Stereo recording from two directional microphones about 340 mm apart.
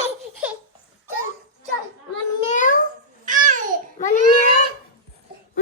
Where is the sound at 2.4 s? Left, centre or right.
Centre.